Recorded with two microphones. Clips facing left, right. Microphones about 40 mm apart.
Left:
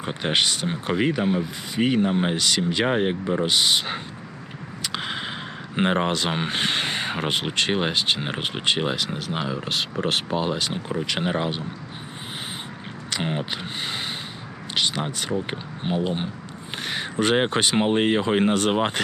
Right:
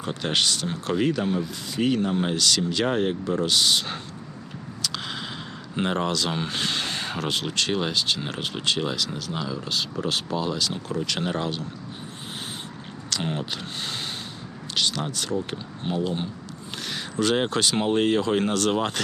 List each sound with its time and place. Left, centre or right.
0.0 s speech: left
4.8 s a sound: left
5.7 s speech: left
13.1 s speech: left